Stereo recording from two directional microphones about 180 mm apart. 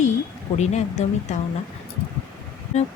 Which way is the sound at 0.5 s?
40° left (ahead or behind).